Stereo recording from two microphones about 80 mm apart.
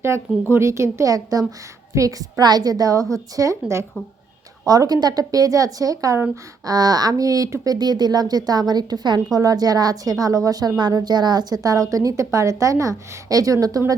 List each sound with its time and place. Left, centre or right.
0.5 s speech: right
4.6 s speech: right